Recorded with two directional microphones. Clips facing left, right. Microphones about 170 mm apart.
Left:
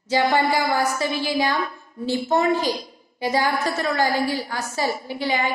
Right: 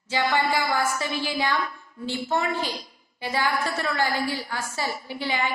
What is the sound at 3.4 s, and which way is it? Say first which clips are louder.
A woman's voice: left 3 dB; 40° left (ahead or behind).